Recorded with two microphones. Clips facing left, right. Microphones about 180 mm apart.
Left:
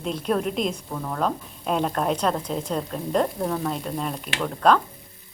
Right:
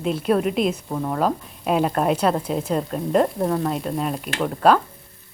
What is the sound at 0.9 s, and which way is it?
Speech, 20° right (ahead or behind).